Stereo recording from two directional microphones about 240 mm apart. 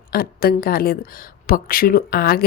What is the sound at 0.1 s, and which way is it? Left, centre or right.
Speech, left.